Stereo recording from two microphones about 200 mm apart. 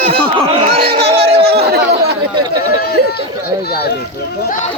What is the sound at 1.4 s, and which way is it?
Speech, 55° right (ahead or behind).